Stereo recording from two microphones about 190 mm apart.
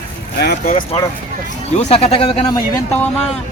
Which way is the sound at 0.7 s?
40° left (ahead or behind).